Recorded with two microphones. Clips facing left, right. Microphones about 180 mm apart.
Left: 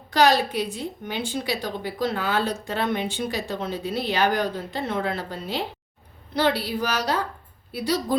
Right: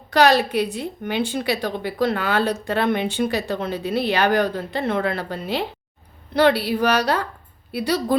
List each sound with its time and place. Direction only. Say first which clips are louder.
0.1 s a woman's voice: right 3 dB; 65° right (ahead or behind)